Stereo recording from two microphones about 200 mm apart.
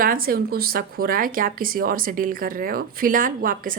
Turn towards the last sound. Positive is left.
turn(degrees=-45)  # may be behind; listen again after turning